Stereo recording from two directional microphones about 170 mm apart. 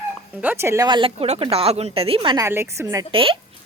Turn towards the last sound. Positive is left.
turn(degrees=-30)  # may be behind; listen again after turning